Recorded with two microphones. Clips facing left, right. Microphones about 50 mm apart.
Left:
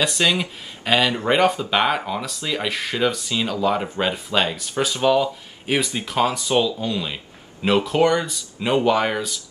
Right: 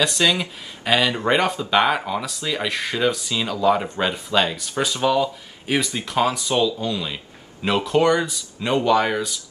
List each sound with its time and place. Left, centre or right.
0.0 s speech: centre